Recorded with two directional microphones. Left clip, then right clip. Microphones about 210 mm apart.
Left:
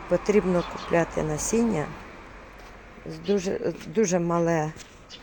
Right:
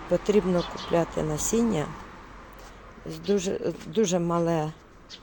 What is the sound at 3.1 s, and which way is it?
Speech, 10° right (ahead or behind).